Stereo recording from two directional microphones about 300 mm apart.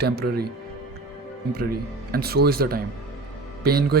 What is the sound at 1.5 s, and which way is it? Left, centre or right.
Speech, right.